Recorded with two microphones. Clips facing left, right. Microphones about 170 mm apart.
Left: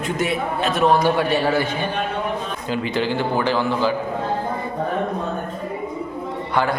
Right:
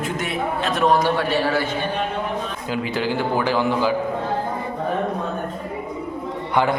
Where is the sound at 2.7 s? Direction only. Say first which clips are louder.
Left 2 dB; 5° right (ahead or behind).